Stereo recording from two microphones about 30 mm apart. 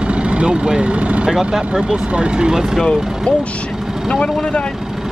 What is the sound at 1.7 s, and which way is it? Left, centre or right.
Speech, right.